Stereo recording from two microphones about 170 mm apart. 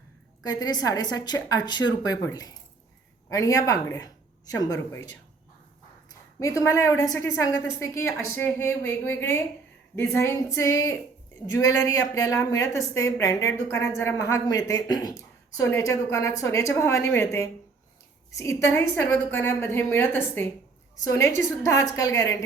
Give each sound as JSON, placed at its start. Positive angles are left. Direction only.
{"t": 0.4, "sound": "a woman's voice", "side_deg": 25}
{"t": 6.4, "sound": "a woman's voice", "side_deg": 20}